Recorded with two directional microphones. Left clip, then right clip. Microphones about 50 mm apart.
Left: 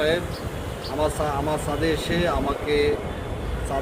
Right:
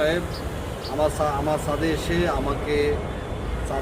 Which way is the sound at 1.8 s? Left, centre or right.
Right.